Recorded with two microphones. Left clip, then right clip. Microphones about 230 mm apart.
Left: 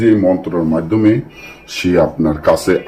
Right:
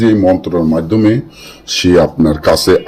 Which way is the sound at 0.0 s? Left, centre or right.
Right.